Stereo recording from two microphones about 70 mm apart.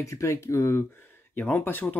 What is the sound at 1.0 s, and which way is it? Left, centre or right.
Speech, left.